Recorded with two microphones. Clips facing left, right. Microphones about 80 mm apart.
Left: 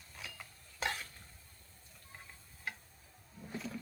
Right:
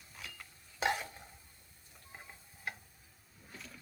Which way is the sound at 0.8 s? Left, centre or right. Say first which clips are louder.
Right 5 dB; centre.